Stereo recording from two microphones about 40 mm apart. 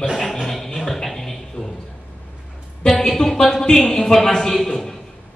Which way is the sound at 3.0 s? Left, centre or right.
Centre.